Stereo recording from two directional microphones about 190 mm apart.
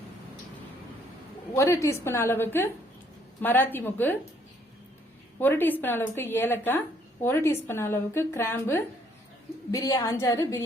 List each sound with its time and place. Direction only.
1.5 s a woman's voice: 15° left (ahead or behind)
5.4 s a woman's voice: 10° left (ahead or behind)